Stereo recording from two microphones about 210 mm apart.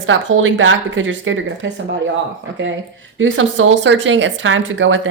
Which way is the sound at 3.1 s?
65° right (ahead or behind).